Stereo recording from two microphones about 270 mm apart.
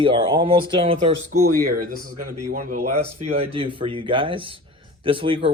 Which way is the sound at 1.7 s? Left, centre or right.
Right.